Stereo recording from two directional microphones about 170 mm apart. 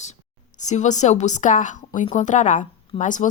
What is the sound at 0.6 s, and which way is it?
A woman's voice, 45° left (ahead or behind).